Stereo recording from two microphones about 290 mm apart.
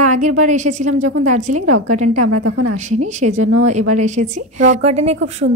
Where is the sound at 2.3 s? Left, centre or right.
Right.